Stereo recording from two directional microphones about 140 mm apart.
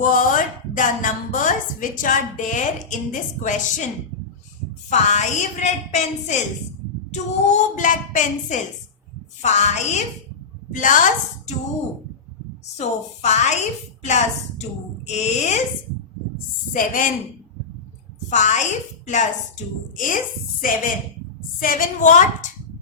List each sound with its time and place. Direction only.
0.0 s a woman's voice: 75° left (ahead or behind)
4.9 s a woman's voice: 55° left (ahead or behind)
10.8 s a woman's voice: 65° left (ahead or behind)
12.7 s a woman's voice: 55° left (ahead or behind)
15.0 s a woman's voice: 55° left (ahead or behind)
16.7 s a woman's voice: 70° left (ahead or behind)
18.3 s a woman's voice: 60° left (ahead or behind)
20.6 s a woman's voice: 80° left; by 22.4 s 65° left (ahead or behind)